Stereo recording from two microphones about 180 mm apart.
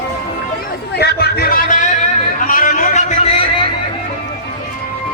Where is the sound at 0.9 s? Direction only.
65° left (ahead or behind); by 3.6 s 35° left (ahead or behind).